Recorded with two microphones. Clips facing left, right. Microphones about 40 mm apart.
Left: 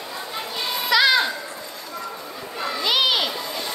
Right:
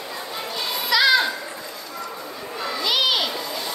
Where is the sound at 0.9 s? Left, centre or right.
Left.